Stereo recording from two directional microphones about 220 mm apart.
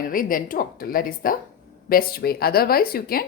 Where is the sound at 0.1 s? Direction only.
40° left (ahead or behind).